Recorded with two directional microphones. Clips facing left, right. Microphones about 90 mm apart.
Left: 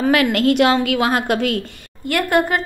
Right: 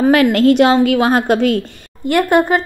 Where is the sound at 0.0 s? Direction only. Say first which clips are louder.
Right 5 dB; 35° right (ahead or behind).